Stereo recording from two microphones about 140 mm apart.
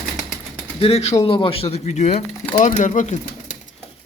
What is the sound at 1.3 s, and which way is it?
Speech, 40° left (ahead or behind).